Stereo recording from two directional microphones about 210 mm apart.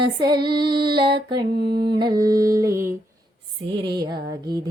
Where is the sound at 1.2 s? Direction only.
20° right (ahead or behind).